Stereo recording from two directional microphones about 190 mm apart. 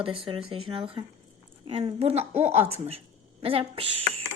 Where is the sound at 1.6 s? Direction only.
30° right (ahead or behind).